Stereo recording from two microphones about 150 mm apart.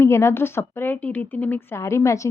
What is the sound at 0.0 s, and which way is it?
Speech, 20° left (ahead or behind).